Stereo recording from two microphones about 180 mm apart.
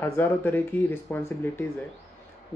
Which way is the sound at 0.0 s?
10° left (ahead or behind).